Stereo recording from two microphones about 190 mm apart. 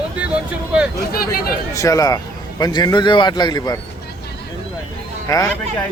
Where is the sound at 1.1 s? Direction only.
50° left (ahead or behind).